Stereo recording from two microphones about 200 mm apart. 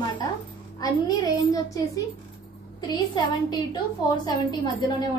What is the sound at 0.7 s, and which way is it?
Speech, 20° left (ahead or behind).